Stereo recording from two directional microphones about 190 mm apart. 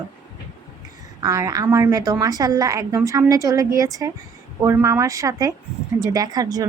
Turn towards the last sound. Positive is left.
turn(degrees=-20)  # may be behind; listen again after turning